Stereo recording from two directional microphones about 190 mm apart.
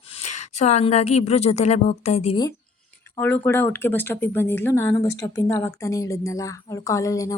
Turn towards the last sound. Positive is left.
turn(degrees=15)  # may be behind; listen again after turning